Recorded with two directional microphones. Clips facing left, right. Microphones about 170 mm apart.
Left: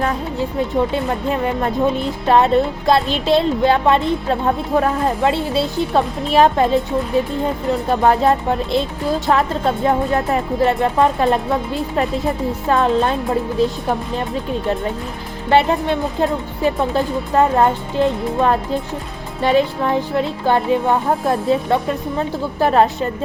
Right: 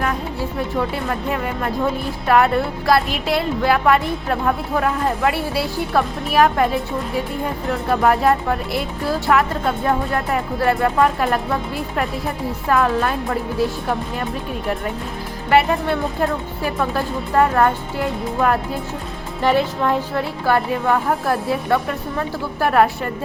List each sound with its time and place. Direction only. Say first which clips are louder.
0.0 s speech: left 3 dB; 20° left (ahead or behind)
15.4 s speech: left 1 dB; 25° left (ahead or behind)